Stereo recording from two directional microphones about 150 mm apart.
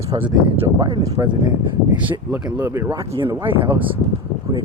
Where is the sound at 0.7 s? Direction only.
30° right (ahead or behind).